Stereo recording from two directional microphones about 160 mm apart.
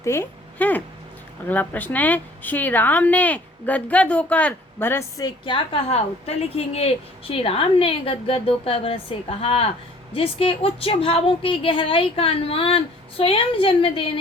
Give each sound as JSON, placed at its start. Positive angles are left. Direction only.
{"t": 0.0, "sound": "a woman's voice", "side_deg": 15}